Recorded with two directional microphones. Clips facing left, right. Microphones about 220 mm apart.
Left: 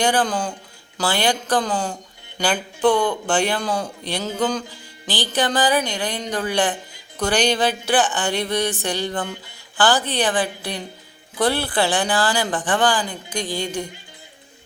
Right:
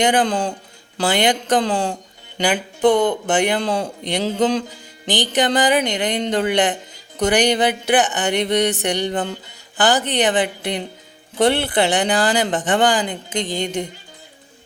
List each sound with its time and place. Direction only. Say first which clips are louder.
0.0 s speech: right 3 dB; 20° right (ahead or behind)
2.4 s speech: right 2 dB; 15° right (ahead or behind)